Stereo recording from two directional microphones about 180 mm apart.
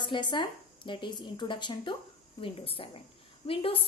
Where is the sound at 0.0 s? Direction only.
25° left (ahead or behind).